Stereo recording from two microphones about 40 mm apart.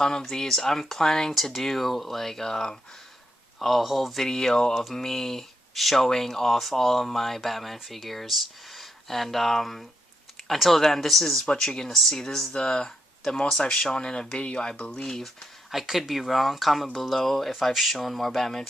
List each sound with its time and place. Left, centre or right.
0.0 s speech: centre
1.3 s speech: centre
3.6 s speech: centre
4.3 s speech: centre
15.7 s speech: centre